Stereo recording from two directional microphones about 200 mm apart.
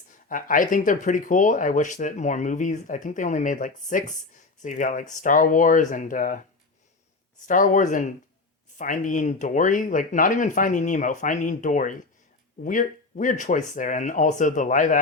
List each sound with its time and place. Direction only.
0.3 s speech: 40° left (ahead or behind)
7.4 s speech: 40° left (ahead or behind)